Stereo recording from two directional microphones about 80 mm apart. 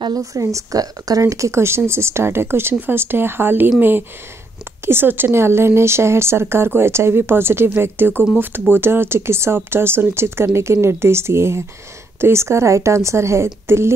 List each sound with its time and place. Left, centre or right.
0.2 s speech: right
4.8 s speech: right